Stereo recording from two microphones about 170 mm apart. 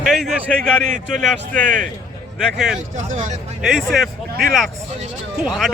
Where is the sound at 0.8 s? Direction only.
50° right (ahead or behind).